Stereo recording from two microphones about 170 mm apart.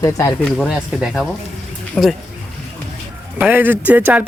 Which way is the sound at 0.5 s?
Centre (ahead or behind).